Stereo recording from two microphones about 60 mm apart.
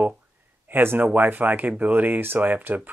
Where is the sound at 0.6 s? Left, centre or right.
Right.